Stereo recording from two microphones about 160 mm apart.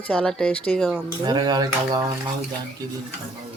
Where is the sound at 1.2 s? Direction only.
25° right (ahead or behind).